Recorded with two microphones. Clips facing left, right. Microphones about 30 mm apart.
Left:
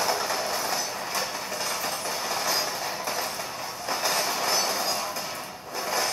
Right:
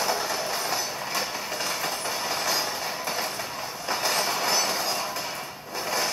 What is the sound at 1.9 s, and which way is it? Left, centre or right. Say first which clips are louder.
Vehicle: right 1 dB; centre.